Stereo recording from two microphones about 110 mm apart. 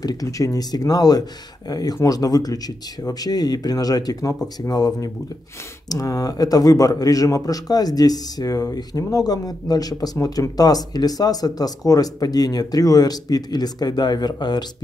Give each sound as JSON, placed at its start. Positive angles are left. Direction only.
{"t": 0.0, "sound": "speech", "side_deg": 35}